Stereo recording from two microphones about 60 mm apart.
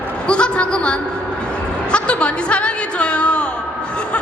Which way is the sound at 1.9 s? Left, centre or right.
Centre.